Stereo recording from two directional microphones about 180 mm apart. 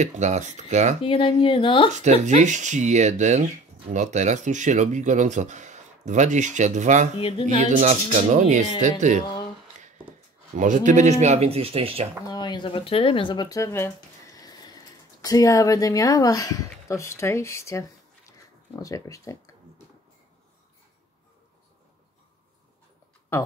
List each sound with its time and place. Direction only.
0.0 s speech: 40° right (ahead or behind)
1.0 s speech: 30° left (ahead or behind)
2.2 s speech: 40° right (ahead or behind)
7.2 s speech: 30° left (ahead or behind)
7.8 s speech: 40° right (ahead or behind)
10.5 s speech: 45° right (ahead or behind)
12.3 s speech: 25° left (ahead or behind)